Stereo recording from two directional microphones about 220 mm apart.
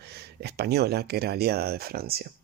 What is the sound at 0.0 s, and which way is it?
Speech, 50° right (ahead or behind).